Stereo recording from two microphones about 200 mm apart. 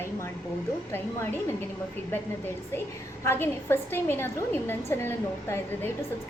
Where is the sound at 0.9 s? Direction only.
10° left (ahead or behind).